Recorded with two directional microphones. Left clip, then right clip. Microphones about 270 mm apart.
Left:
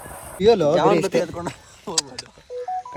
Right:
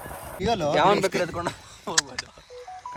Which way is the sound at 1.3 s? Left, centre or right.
Right.